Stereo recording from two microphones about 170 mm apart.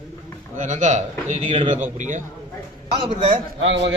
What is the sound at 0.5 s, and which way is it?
Speech, 45° right (ahead or behind).